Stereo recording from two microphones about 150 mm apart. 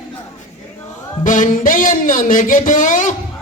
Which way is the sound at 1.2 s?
60° left (ahead or behind).